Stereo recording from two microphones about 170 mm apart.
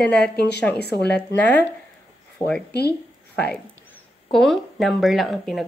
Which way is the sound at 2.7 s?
75° left (ahead or behind).